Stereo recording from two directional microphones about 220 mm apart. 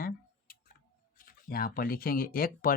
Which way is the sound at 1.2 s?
40° left (ahead or behind).